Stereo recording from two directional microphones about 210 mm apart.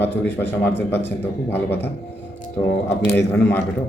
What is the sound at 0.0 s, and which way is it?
Speech, 10° left (ahead or behind).